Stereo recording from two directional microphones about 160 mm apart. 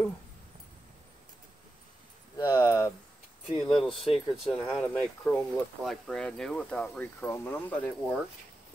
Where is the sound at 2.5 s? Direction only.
25° left (ahead or behind).